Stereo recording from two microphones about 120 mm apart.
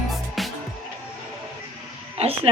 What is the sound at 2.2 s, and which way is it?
Music, 55° right (ahead or behind).